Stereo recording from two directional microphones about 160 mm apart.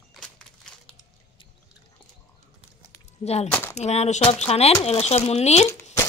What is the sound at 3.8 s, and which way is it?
Speech, 45° left (ahead or behind).